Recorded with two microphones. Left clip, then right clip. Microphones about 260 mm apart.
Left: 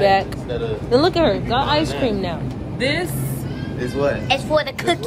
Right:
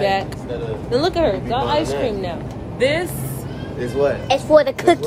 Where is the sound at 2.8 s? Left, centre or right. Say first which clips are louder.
Right 3 dB; right.